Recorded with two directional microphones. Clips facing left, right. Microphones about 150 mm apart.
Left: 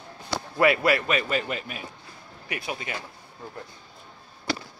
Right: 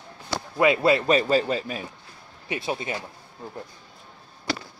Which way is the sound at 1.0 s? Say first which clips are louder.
Right 6 dB; 35° right (ahead or behind).